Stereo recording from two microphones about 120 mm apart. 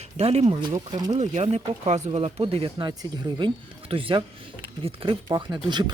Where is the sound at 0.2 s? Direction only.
60° right (ahead or behind).